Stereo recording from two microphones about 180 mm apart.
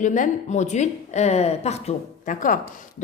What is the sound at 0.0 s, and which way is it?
A woman's voice, 45° left (ahead or behind).